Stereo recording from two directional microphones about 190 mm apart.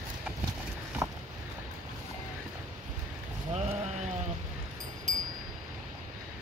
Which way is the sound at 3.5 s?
35° right (ahead or behind).